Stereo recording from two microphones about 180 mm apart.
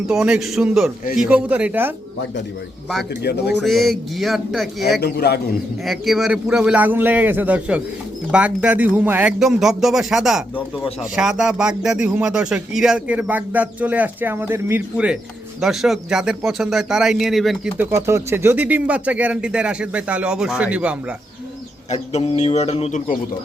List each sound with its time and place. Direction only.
0.1 s speech: 5° right (ahead or behind)
3.6 s speech: centre (ahead or behind)
4.9 s a man's voice: 60° left (ahead or behind)
5.8 s speech: centre (ahead or behind)
17.9 s speech: 15° right (ahead or behind)
22.1 s bird: 35° left (ahead or behind)